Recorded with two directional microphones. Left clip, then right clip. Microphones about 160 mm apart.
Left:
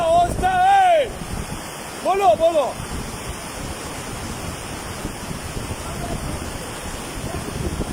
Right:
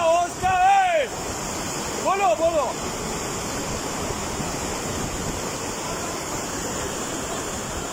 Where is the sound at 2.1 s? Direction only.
35° left (ahead or behind).